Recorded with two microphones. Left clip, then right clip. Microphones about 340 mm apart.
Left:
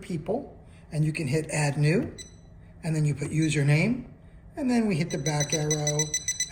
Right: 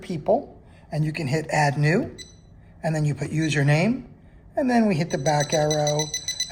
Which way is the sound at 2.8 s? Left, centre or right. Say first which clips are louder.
Right 5 dB; right.